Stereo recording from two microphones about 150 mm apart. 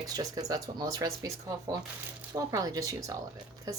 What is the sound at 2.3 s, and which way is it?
Speech, 25° right (ahead or behind).